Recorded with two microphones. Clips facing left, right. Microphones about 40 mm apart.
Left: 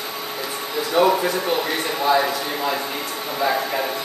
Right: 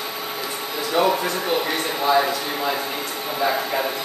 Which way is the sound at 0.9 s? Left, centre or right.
Centre.